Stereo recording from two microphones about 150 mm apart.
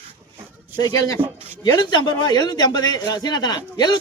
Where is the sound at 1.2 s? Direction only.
10° right (ahead or behind).